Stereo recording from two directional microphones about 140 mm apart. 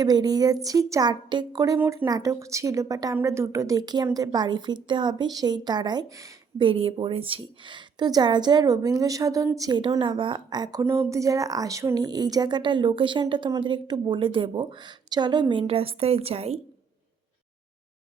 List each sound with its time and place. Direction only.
0.0 s a woman's voice: 30° right (ahead or behind)
1.8 s speech: 15° right (ahead or behind)
2.0 s a woman's voice: 25° right (ahead or behind)
6.6 s a woman's voice: 40° right (ahead or behind)